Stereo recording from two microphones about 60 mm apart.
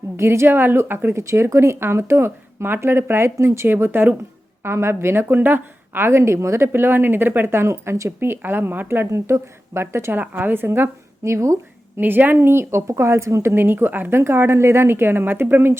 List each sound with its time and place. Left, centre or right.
0.2 s a woman's voice: right
1.1 s speech: right
4.6 s speech: right
6.7 s a woman's voice: right
8.2 s a woman's voice: right
9.0 s speech: right
10.2 s a woman's voice: right
11.2 s speech: right
11.9 s a woman's voice: right
12.4 s a woman's voice: right